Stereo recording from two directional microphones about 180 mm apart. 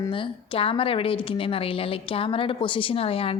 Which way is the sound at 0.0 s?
30° left (ahead or behind).